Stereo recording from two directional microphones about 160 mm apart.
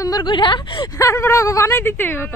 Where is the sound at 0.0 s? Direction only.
25° left (ahead or behind).